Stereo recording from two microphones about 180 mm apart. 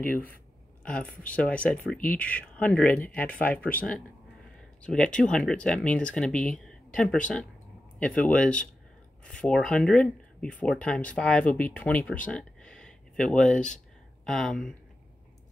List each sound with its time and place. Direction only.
0.0 s speech: 10° left (ahead or behind)